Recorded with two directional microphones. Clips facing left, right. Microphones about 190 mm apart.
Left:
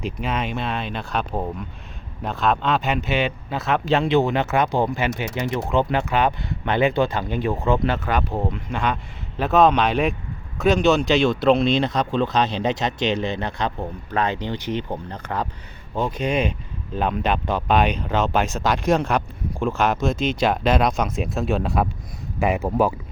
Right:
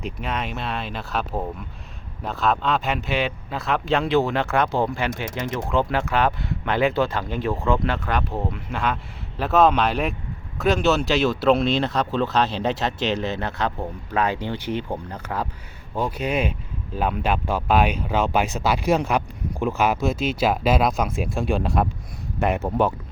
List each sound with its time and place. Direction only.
0.0 s speech: centre (ahead or behind)
5.1 s speech: 45° right (ahead or behind)
5.5 s speech: centre (ahead or behind)